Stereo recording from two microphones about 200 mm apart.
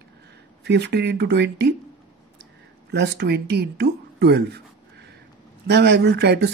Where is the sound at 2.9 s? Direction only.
55° right (ahead or behind).